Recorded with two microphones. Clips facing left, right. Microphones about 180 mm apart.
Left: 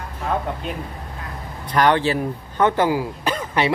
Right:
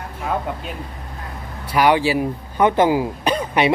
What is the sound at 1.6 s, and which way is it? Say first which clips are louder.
Speech: right 1 dB; 10° right (ahead or behind).